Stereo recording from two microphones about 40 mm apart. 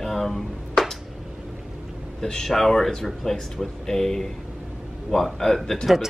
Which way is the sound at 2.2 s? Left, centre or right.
Centre.